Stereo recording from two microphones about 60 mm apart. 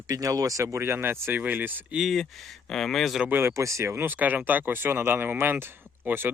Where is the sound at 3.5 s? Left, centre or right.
Right.